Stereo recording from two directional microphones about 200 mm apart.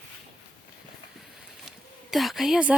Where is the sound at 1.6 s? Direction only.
Centre (ahead or behind).